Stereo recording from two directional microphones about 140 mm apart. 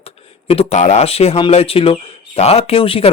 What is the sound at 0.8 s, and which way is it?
Speech, 50° left (ahead or behind).